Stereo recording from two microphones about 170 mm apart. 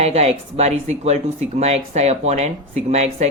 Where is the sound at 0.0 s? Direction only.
40° right (ahead or behind).